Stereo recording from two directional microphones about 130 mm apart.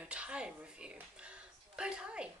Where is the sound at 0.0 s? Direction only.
10° right (ahead or behind).